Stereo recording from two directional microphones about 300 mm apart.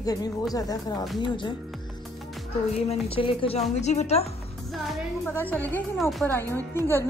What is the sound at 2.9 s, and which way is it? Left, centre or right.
A woman's voice, centre.